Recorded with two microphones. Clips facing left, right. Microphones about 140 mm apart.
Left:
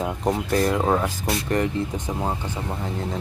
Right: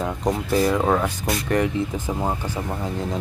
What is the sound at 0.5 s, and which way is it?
Speech, centre (ahead or behind).